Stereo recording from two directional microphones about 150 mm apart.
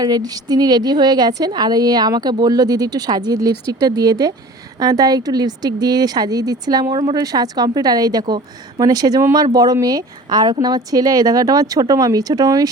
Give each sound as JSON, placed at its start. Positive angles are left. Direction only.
{"t": 0.0, "sound": "a woman's voice", "side_deg": -25}